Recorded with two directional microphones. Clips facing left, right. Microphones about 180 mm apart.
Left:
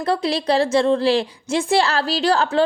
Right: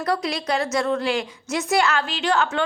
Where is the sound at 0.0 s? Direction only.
30° left (ahead or behind).